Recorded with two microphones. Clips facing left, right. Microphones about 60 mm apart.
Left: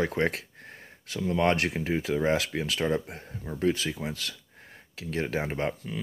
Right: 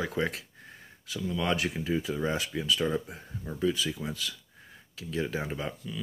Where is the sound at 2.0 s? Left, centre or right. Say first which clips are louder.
Left 5 dB; left.